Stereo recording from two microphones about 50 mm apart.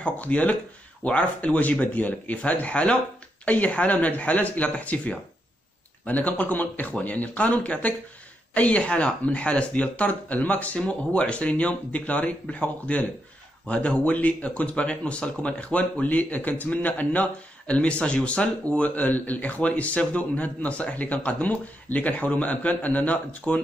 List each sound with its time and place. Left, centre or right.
0.0 s a man's voice: left
10.8 s a man's voice: left